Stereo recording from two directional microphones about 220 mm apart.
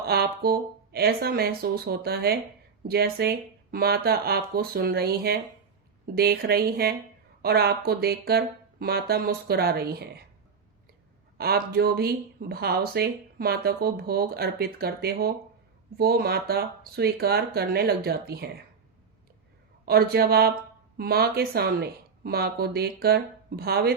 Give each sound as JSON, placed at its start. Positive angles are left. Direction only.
{"t": 0.1, "sound": "speech", "side_deg": -45}
{"t": 11.3, "sound": "speech", "side_deg": -45}
{"t": 19.8, "sound": "speech", "side_deg": -45}